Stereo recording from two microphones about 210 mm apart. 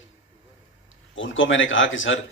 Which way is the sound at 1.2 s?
65° left (ahead or behind).